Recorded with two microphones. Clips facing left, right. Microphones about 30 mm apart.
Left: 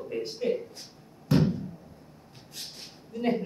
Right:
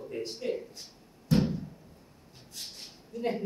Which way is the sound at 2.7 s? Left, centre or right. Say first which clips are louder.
Left 1 dB; centre.